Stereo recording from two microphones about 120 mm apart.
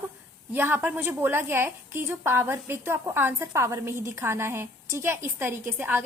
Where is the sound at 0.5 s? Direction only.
15° right (ahead or behind).